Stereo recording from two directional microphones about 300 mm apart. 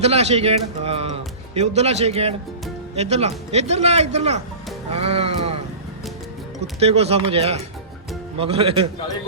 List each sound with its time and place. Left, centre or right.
0.0 s speech: right
6.7 s speech: centre